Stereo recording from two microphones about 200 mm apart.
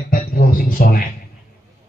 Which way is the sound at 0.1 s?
45° left (ahead or behind).